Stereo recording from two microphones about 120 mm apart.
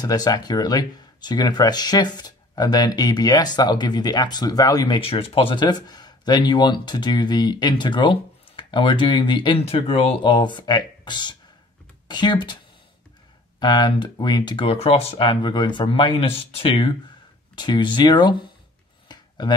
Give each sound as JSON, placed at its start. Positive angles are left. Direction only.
{"t": 0.0, "sound": "speech", "side_deg": 35}
{"t": 5.0, "sound": "speech", "side_deg": 55}
{"t": 9.6, "sound": "speech", "side_deg": 55}
{"t": 10.2, "sound": "speech", "side_deg": 40}
{"t": 13.6, "sound": "speech", "side_deg": 40}
{"t": 19.0, "sound": "a sound", "side_deg": 35}